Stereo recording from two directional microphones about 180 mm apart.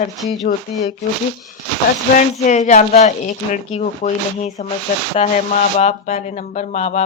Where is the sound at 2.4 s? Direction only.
40° left (ahead or behind).